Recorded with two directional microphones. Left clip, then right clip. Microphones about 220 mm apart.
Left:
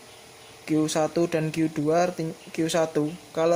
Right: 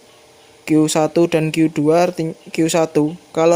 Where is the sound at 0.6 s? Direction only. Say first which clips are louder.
Right 9 dB; 40° right (ahead or behind).